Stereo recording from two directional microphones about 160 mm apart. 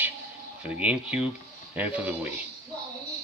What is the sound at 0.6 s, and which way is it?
Speech, 10° right (ahead or behind).